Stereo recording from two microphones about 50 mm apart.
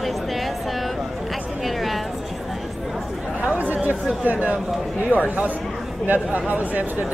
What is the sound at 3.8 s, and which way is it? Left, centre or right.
Speech, right.